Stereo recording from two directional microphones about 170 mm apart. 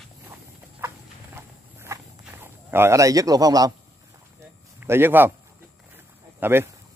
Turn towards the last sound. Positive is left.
turn(degrees=-15)  # may be behind; listen again after turning